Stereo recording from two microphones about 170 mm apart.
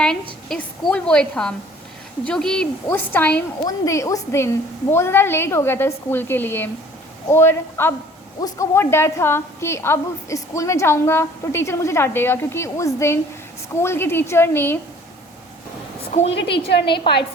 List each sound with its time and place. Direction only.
0.0 s a woman's voice: 5° left (ahead or behind)
16.6 s a woman's voice: 75° left (ahead or behind)